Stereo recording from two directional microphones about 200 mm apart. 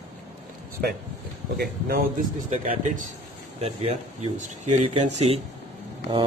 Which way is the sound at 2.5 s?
40° right (ahead or behind).